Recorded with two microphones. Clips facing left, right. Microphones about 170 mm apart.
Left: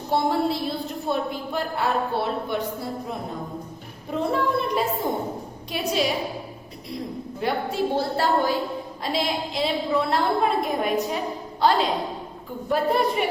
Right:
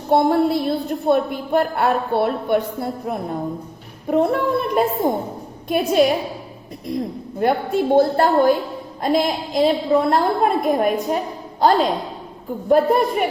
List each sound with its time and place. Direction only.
0.1 s a woman's voice: 55° right (ahead or behind)
7.3 s a woman's voice: 55° right (ahead or behind)